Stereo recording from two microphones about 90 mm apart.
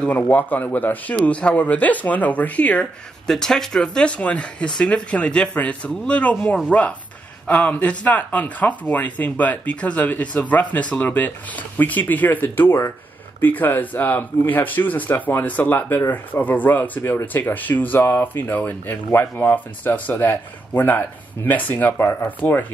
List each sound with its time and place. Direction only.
0.0 s speech: 15° left (ahead or behind)